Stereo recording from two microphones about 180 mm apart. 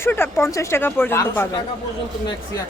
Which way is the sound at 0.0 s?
15° left (ahead or behind).